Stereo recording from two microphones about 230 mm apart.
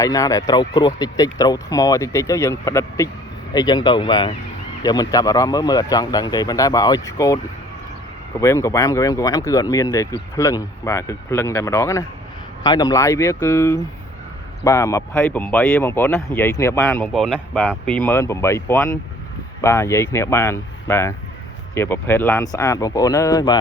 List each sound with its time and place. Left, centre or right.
0.0 s speech: centre
8.4 s speech: centre